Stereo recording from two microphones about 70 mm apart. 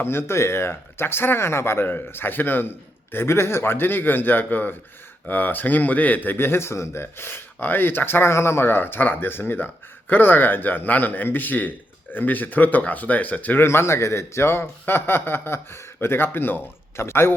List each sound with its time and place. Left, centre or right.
0.0 s speech: left
13.7 s speech: left